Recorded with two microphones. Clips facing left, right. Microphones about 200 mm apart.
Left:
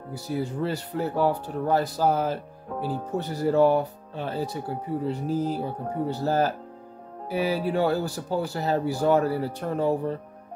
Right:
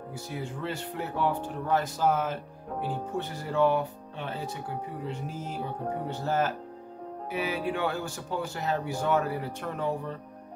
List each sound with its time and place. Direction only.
0.1 s speech: 35° left (ahead or behind)